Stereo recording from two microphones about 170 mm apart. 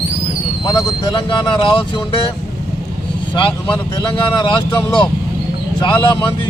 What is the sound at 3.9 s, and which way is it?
Speech, 25° left (ahead or behind).